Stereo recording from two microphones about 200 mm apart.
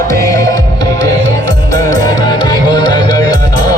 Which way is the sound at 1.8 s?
20° left (ahead or behind).